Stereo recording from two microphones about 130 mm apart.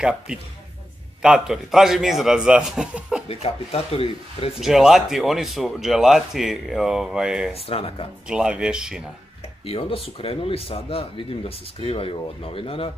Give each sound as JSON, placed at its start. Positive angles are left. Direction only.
{"t": 0.0, "sound": "speech", "side_deg": -5}
{"t": 3.3, "sound": "speech", "side_deg": 50}
{"t": 4.6, "sound": "speech", "side_deg": 0}
{"t": 7.5, "sound": "speech", "side_deg": 50}
{"t": 8.3, "sound": "speech", "side_deg": -5}
{"t": 9.7, "sound": "speech", "side_deg": 50}